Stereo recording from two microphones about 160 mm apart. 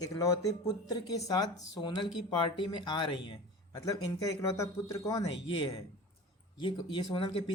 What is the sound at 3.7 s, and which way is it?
A man's voice, 20° left (ahead or behind).